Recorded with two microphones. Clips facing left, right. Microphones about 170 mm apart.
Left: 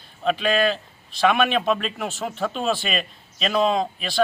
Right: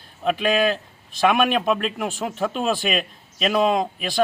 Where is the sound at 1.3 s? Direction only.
5° right (ahead or behind).